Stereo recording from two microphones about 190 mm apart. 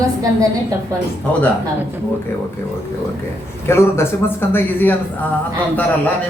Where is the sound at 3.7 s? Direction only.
15° left (ahead or behind).